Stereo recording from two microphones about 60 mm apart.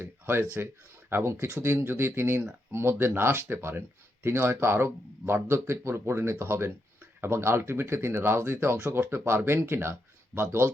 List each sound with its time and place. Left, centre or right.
0.0 s speech: right
1.8 s speech: right